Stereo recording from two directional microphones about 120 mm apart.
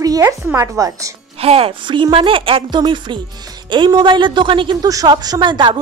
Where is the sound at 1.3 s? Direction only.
55° right (ahead or behind).